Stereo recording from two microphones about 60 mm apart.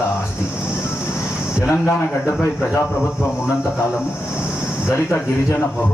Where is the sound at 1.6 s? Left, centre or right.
Left.